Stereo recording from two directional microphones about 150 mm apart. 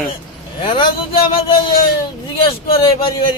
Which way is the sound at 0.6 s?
35° left (ahead or behind).